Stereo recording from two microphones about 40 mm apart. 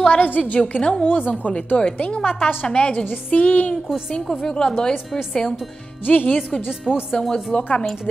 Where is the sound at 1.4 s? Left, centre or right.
Left.